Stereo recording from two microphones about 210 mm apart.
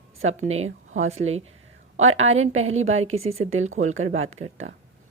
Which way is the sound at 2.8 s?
75° right (ahead or behind).